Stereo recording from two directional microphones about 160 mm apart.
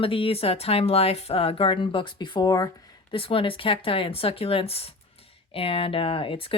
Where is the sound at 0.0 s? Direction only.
35° left (ahead or behind).